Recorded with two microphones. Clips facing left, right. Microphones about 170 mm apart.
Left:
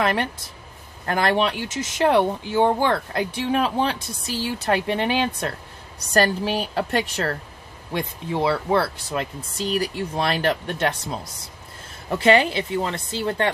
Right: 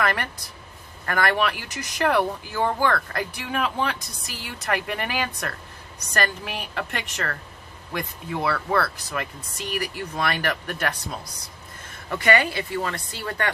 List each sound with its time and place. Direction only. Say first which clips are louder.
0.0 s a woman's voice: left 3 dB; 25° left (ahead or behind)